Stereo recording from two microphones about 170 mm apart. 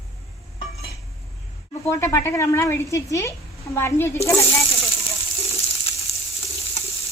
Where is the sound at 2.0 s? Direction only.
15° left (ahead or behind).